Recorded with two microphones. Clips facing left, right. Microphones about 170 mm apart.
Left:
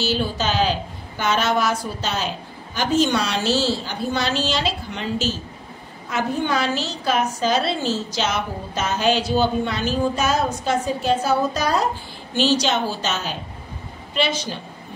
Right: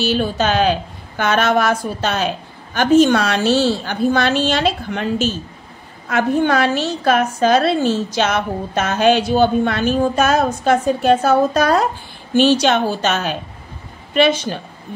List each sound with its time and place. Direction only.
0.0 s a woman's voice: 55° right (ahead or behind)